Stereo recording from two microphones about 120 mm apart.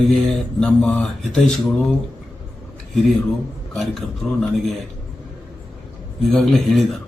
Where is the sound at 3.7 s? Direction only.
5° left (ahead or behind).